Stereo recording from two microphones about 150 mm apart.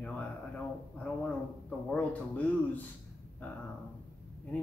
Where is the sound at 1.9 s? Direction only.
10° left (ahead or behind).